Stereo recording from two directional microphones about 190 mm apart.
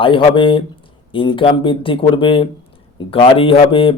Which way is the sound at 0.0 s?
25° left (ahead or behind).